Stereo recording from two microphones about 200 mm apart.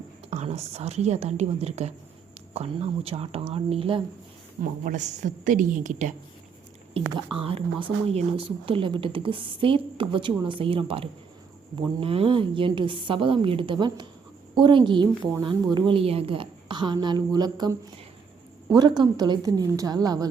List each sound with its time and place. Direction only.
0.3 s a woman's voice: 35° right (ahead or behind)
4.6 s a woman's voice: 40° right (ahead or behind)
7.3 s speech: 25° right (ahead or behind)